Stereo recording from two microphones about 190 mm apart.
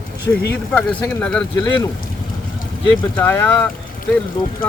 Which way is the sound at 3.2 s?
10° left (ahead or behind).